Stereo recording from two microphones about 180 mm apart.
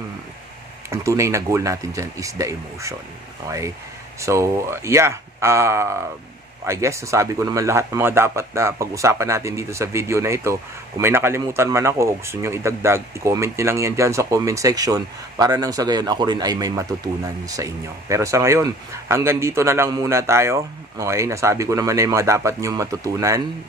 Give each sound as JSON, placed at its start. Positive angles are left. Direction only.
{"t": 0.8, "sound": "a man's voice", "side_deg": -15}